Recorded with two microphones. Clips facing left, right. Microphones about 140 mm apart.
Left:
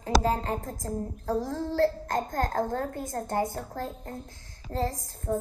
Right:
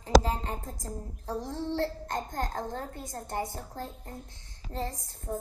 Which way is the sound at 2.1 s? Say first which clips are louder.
Left 5 dB; 45° left (ahead or behind).